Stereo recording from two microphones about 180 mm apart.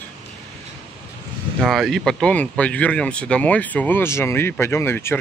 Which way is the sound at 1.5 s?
Centre (ahead or behind).